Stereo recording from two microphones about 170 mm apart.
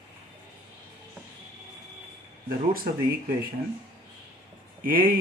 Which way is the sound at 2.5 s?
60° right (ahead or behind).